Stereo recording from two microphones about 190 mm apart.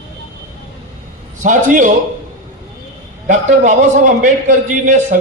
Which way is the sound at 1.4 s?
40° right (ahead or behind).